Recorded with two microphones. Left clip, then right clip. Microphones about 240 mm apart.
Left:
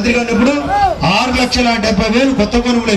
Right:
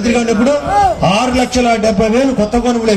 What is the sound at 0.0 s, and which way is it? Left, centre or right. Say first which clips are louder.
Speech: even; right.